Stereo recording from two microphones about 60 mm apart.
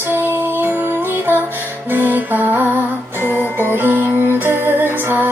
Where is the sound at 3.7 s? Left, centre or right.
Right.